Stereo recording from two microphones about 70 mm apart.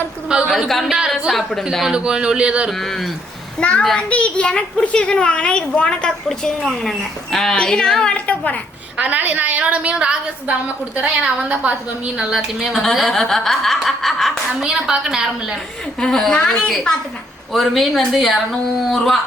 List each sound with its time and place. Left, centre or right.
0.4 s speech: centre
1.9 s a woman's voice: centre
2.6 s speech: centre
3.6 s a child's voice: centre
8.3 s a woman's voice: left
9.0 s a woman's voice: right
12.3 s speech: centre
14.6 s a woman's voice: centre
16.0 s a child's voice: centre